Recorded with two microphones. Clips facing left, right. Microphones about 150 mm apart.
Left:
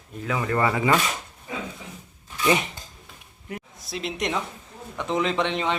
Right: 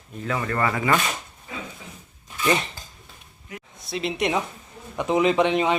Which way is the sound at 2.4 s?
10° left (ahead or behind).